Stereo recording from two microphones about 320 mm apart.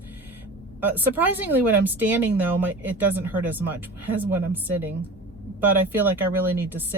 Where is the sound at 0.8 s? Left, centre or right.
Centre.